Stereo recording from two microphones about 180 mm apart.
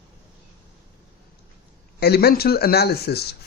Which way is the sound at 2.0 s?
60° left (ahead or behind).